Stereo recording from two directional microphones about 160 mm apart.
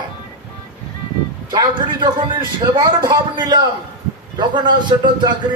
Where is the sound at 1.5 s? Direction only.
25° right (ahead or behind).